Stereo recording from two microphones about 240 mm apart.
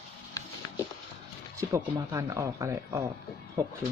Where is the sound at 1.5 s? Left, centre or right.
Centre.